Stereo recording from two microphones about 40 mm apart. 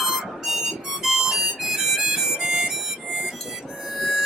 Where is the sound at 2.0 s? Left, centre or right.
Centre.